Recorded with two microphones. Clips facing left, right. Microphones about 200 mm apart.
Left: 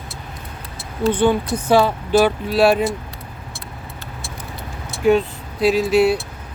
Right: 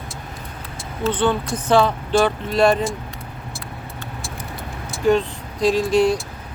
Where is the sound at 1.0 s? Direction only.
10° left (ahead or behind).